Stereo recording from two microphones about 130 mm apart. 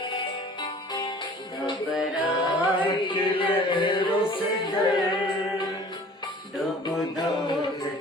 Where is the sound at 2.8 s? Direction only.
40° left (ahead or behind).